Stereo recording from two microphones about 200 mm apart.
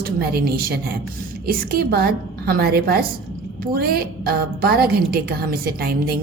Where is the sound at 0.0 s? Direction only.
50° right (ahead or behind).